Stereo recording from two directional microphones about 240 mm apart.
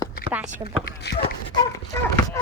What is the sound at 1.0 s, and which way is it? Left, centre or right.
Speech, left.